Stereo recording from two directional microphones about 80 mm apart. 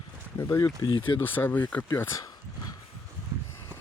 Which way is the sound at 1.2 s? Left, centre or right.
Left.